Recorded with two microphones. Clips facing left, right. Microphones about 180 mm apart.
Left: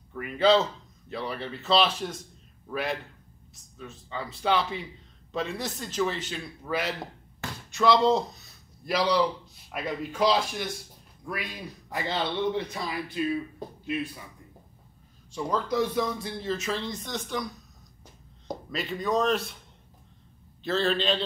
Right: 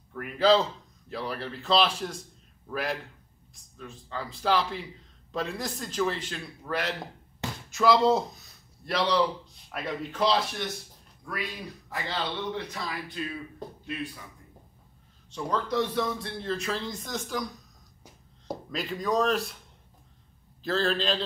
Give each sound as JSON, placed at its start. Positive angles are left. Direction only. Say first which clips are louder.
{"t": 0.1, "sound": "a man's voice", "louder": "even", "side_deg": 0}
{"t": 11.9, "sound": "a man's voice", "louder": "left 3 dB", "side_deg": 15}
{"t": 15.3, "sound": "speech", "louder": "left 1 dB", "side_deg": 5}
{"t": 18.5, "sound": "speech", "louder": "even", "side_deg": 0}
{"t": 20.6, "sound": "speech", "louder": "left 1 dB", "side_deg": 0}